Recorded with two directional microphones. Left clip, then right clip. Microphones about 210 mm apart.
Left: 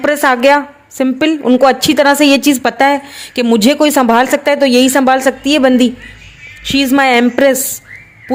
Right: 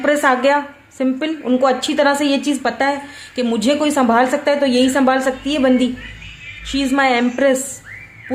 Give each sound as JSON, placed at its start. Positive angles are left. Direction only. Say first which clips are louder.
{"t": 0.0, "sound": "a woman's voice", "louder": "left 4 dB", "side_deg": 45}